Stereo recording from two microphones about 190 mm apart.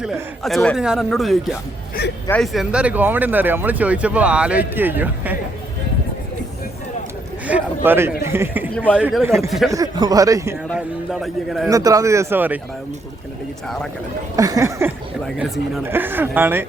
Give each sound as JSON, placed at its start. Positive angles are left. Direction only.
{"t": 0.0, "sound": "a man's voice", "side_deg": 0}
{"t": 7.4, "sound": "a man's voice", "side_deg": -10}
{"t": 8.7, "sound": "speech", "side_deg": 5}
{"t": 9.0, "sound": "speech", "side_deg": -10}
{"t": 10.7, "sound": "a man's voice", "side_deg": 0}
{"t": 11.7, "sound": "speech", "side_deg": -15}
{"t": 14.3, "sound": "speech", "side_deg": -20}
{"t": 15.4, "sound": "a man's voice", "side_deg": 0}
{"t": 15.8, "sound": "speech", "side_deg": -10}